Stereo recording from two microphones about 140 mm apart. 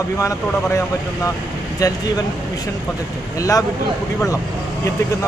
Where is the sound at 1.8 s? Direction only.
25° left (ahead or behind).